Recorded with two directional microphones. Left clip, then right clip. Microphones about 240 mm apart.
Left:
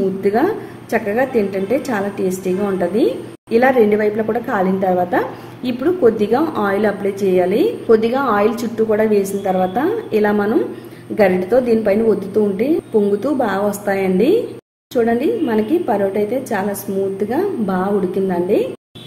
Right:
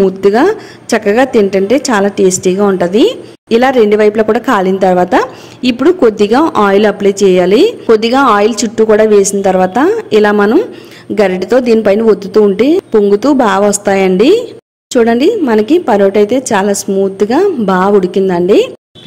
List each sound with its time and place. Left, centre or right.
0.2 s a woman's voice: right